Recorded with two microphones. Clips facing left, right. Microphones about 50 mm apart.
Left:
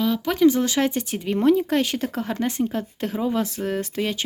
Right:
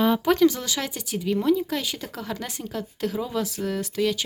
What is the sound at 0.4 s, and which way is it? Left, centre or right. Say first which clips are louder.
A woman's voice: left 4 dB; left.